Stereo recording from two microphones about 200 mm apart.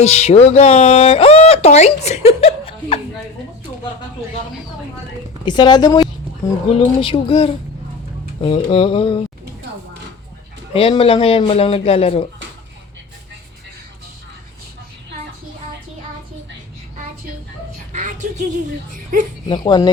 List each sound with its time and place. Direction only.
0.0 s speech: 30° left (ahead or behind)
5.5 s a man's voice: 20° left (ahead or behind)
10.8 s a man's voice: 25° left (ahead or behind)
17.9 s a sound: 35° right (ahead or behind)
19.5 s a man's voice: 25° left (ahead or behind)